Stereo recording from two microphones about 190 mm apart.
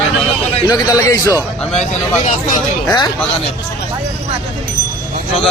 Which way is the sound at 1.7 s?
35° left (ahead or behind).